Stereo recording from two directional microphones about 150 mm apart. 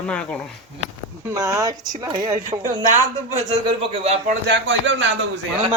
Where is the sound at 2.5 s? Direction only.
55° right (ahead or behind).